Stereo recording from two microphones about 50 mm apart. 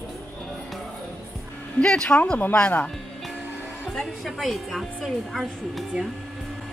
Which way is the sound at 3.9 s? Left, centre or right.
Centre.